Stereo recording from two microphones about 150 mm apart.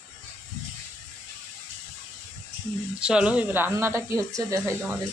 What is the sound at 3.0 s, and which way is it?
Speech, 5° right (ahead or behind).